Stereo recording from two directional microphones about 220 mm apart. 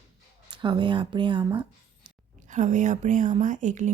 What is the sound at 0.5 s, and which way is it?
Speech, 20° right (ahead or behind).